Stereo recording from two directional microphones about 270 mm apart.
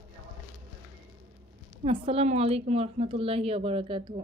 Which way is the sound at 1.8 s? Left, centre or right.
Right.